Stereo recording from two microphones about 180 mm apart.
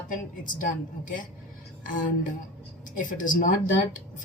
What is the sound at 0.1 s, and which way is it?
A woman's voice, 50° left (ahead or behind).